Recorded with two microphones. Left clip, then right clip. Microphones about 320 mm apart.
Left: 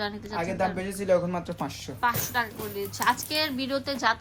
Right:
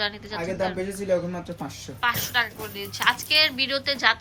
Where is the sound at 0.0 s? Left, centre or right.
Centre.